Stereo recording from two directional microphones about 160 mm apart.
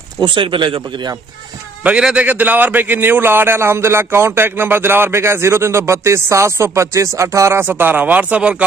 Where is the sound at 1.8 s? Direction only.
5° right (ahead or behind).